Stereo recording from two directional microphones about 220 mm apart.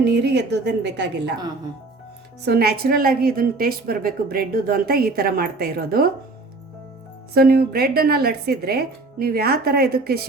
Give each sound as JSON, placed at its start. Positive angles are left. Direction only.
{"t": 0.0, "sound": "a woman's voice", "side_deg": -50}
{"t": 2.4, "sound": "a woman's voice", "side_deg": -45}
{"t": 7.3, "sound": "a woman's voice", "side_deg": -45}